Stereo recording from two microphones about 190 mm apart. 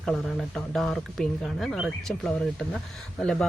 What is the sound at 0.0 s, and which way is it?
Speech, centre (ahead or behind).